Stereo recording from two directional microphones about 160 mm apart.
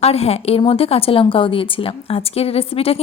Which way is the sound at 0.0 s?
40° left (ahead or behind).